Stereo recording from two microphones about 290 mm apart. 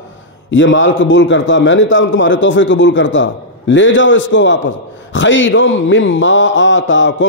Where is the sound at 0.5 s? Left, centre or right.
Left.